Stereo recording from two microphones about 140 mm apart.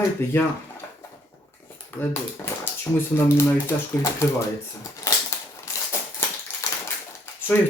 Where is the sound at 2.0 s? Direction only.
20° left (ahead or behind).